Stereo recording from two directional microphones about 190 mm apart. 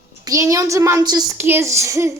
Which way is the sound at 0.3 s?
15° right (ahead or behind).